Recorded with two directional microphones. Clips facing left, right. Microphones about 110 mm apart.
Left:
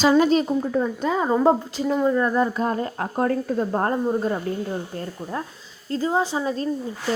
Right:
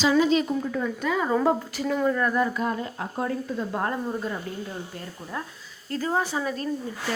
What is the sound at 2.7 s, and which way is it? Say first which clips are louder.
Speech: left 6 dB; 50° left (ahead or behind).